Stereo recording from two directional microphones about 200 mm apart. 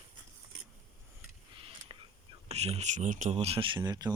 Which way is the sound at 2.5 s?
30° right (ahead or behind).